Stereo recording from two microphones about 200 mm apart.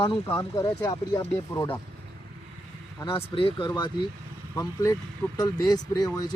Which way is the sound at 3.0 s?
20° left (ahead or behind).